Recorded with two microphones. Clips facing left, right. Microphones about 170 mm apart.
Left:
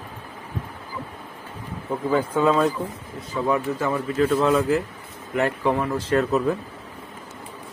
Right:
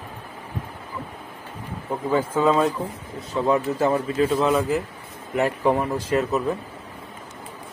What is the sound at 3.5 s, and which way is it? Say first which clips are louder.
Speech: right 3 dB; 30° right (ahead or behind).